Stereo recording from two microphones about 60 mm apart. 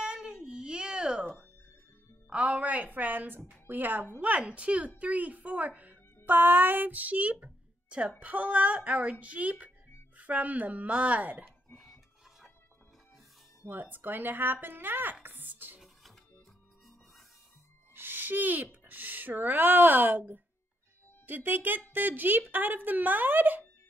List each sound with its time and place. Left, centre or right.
0.0 s baby cry: centre
2.2 s a woman's voice: right
11.7 s a sound: centre
13.9 s speech: right
15.2 s music: right
17.9 s a child's voice: right